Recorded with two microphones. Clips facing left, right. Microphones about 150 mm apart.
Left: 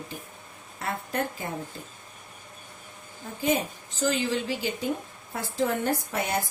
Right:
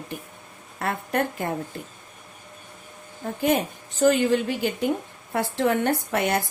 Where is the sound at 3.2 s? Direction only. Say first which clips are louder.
Right 4 dB; 60° right (ahead or behind).